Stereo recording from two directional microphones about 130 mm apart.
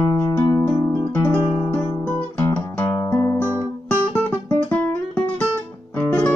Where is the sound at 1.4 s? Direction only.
35° left (ahead or behind).